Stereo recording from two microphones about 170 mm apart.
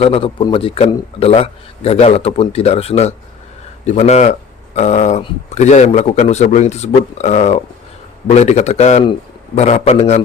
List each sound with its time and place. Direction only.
0.0 s speech: 35° left (ahead or behind)